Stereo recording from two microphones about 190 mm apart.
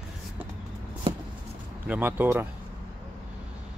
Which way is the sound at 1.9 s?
10° right (ahead or behind).